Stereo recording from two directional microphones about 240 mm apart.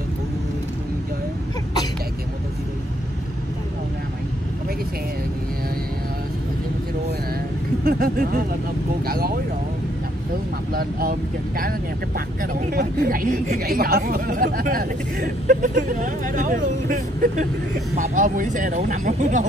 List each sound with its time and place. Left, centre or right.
7.8 s speech: right
10.7 s speech: right